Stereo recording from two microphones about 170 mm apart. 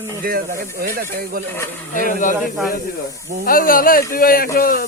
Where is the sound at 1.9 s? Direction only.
50° left (ahead or behind).